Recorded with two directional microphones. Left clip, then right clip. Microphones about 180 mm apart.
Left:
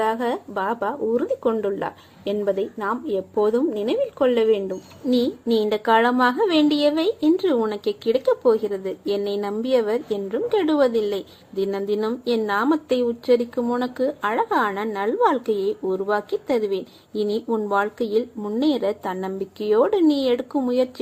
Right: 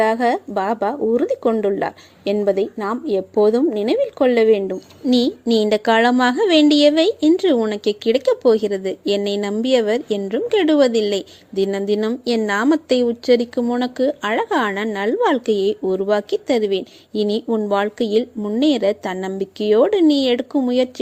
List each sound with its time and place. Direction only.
0.0 s a woman's voice: 35° right (ahead or behind)